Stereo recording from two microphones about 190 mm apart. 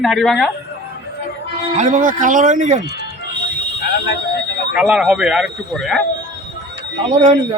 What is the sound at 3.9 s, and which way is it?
Fire alarm, 60° left (ahead or behind).